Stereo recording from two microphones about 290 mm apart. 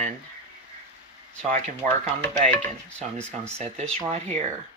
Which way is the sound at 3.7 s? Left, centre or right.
Centre.